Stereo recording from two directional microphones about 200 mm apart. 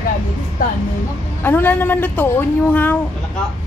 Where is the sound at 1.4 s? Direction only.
10° left (ahead or behind).